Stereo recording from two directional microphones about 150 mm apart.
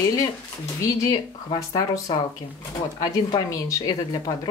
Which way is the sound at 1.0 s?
25° left (ahead or behind).